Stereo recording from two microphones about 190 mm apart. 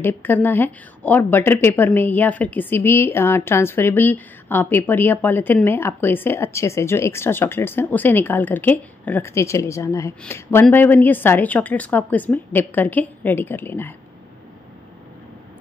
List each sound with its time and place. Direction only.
0.0 s a woman's voice: 10° left (ahead or behind)